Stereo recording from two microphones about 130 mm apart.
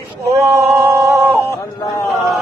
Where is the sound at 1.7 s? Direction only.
30° left (ahead or behind).